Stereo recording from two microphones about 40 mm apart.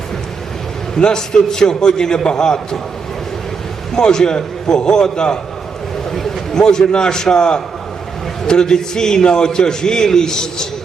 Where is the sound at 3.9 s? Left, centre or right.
Centre.